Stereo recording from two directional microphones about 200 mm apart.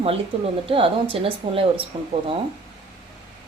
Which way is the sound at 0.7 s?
25° right (ahead or behind).